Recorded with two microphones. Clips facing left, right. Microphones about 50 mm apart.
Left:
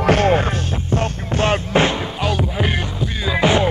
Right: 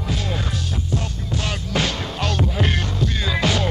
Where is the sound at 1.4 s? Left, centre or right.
Left.